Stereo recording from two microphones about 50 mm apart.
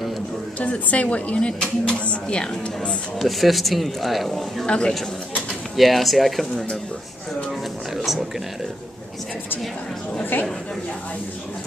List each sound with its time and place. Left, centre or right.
0.6 s a woman's voice: left
3.2 s speech: centre
4.6 s a woman's voice: left
5.8 s speech: centre
7.9 s speech: centre